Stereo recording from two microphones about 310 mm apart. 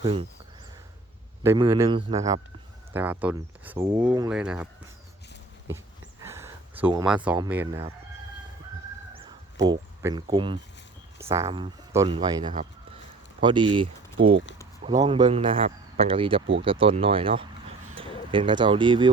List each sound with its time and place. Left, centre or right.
0.0 s a man's voice: centre
1.5 s a man's voice: centre
6.2 s speech: centre
9.1 s a sound: centre
11.2 s a man's voice: centre